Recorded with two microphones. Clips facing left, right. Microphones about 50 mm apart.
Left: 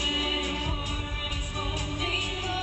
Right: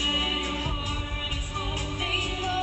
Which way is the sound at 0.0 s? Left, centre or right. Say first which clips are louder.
Right 1 dB; right.